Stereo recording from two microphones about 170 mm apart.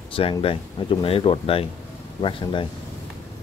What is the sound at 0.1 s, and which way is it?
Speech, 30° left (ahead or behind).